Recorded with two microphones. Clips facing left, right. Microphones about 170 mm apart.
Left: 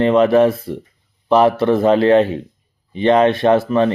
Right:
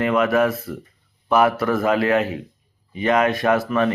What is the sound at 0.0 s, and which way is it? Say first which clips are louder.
Speech: left 6 dB; 30° left (ahead or behind).